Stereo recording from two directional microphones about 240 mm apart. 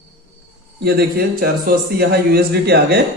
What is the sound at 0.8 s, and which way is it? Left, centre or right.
A man's voice, right.